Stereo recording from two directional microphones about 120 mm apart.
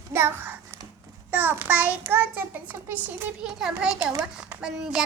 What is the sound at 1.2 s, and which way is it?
A child's voice, 15° right (ahead or behind).